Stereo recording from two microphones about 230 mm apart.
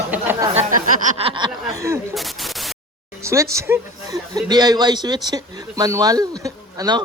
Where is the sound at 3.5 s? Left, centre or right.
Centre.